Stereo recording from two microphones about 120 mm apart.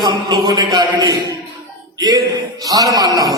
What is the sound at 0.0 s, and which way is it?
A man's voice, 35° right (ahead or behind).